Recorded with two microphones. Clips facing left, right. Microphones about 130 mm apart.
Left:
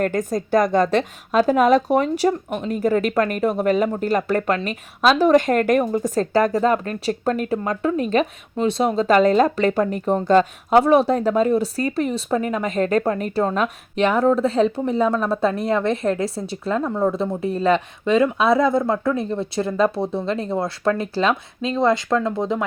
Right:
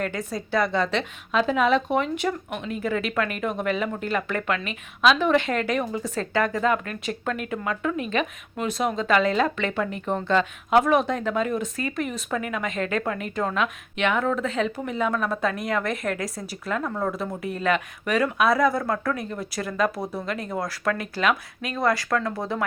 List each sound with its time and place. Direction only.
0.0 s speech: 45° left (ahead or behind); by 22.6 s 20° left (ahead or behind)